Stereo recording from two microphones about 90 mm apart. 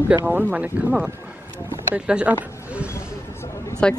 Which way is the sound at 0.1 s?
20° right (ahead or behind).